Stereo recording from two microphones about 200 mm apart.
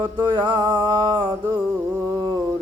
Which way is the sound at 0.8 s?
20° right (ahead or behind).